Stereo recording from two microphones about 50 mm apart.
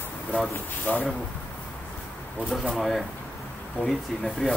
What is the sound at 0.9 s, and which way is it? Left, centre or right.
Speech, left.